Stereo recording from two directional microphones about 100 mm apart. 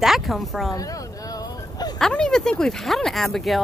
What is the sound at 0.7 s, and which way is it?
Bow-wow, 35° left (ahead or behind).